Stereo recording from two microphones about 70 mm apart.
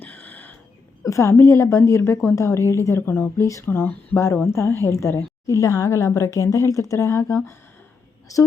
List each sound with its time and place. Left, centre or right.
0.0 s a sound: left
1.0 s a woman's voice: left
5.5 s speech: left